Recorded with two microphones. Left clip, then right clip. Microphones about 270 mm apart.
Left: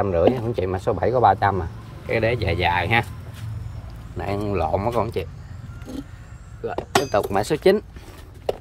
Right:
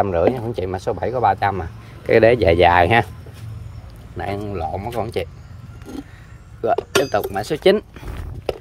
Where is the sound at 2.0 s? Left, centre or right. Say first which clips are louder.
Right 9 dB; centre.